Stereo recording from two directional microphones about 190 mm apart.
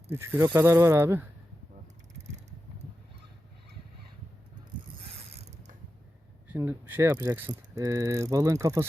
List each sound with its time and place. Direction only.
0.1 s mechanisms: 15° right (ahead or behind)
5.4 s mechanisms: 35° right (ahead or behind)
6.5 s mechanisms: 10° right (ahead or behind)